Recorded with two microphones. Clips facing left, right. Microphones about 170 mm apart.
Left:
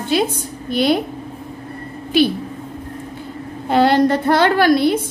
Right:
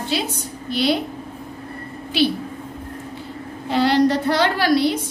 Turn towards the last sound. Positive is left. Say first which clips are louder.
# left 4 dB
turn(degrees=50)  # may be behind; listen again after turning